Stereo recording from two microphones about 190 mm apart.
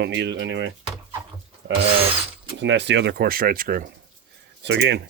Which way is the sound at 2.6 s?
65° right (ahead or behind).